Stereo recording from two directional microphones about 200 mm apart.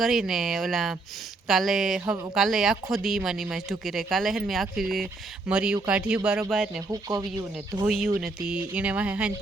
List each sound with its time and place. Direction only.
0.0 s speech: centre (ahead or behind)
6.9 s speech: 20° right (ahead or behind)
7.9 s speech: 5° right (ahead or behind)